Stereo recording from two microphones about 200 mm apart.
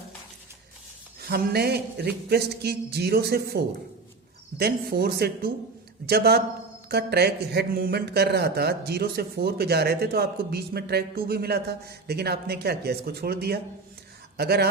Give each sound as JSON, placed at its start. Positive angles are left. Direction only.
{"t": 1.2, "sound": "speech", "side_deg": -50}